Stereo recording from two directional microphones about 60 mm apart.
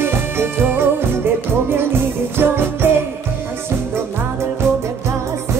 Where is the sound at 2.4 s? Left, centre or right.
Right.